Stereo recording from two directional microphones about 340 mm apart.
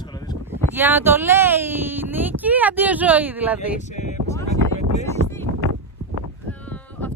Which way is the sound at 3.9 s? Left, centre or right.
Left.